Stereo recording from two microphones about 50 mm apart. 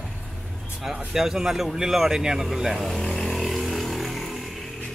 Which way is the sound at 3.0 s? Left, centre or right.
Centre.